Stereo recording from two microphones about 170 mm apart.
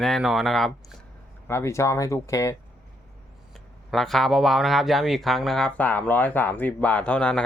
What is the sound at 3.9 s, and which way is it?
Speech, centre (ahead or behind).